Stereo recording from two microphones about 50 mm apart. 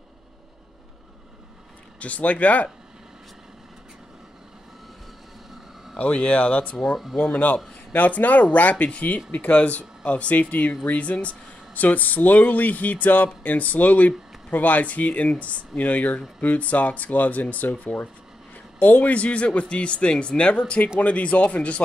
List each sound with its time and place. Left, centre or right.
2.0 s speech: left
5.9 s speech: left
7.9 s speech: left